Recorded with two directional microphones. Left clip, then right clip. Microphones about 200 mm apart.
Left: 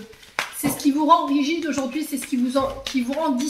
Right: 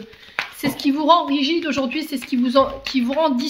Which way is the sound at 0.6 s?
40° right (ahead or behind).